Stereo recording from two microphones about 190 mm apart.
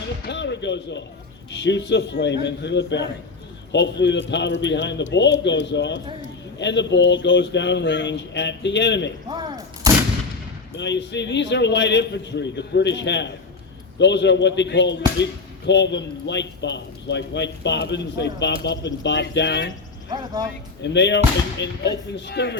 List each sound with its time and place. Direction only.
0.3 s a sound: 65° left (ahead or behind)
1.5 s speech: 70° left (ahead or behind)
9.3 s a sound: 20° right (ahead or behind)
10.8 s speech: 65° left (ahead or behind)
20.1 s speech: 20° right (ahead or behind)
20.8 s speech: 65° left (ahead or behind)